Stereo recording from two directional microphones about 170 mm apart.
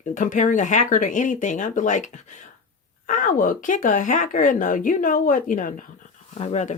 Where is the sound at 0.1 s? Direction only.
50° left (ahead or behind).